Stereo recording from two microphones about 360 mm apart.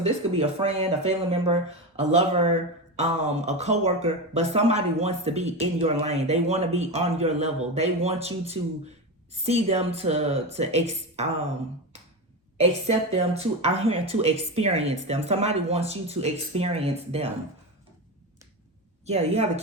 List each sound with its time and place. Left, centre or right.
0.0 s speech: centre
13.1 s speech: centre
19.0 s speech: centre